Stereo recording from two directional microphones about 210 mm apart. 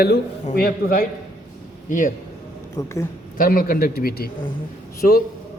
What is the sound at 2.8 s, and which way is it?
Speech, 15° left (ahead or behind).